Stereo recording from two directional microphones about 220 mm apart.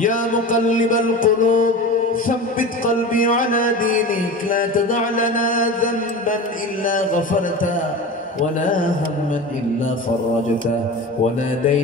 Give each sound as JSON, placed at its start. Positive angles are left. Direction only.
{"t": 0.0, "sound": "music", "side_deg": 35}
{"t": 2.8, "sound": "music", "side_deg": 40}